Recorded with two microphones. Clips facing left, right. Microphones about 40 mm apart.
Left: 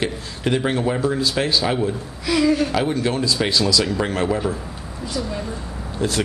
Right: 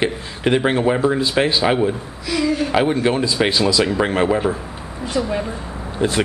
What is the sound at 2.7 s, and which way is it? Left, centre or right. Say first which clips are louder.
A man's voice: right 4 dB; right.